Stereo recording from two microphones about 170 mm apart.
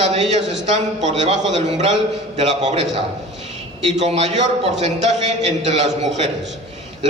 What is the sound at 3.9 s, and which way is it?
A man's voice, 40° right (ahead or behind).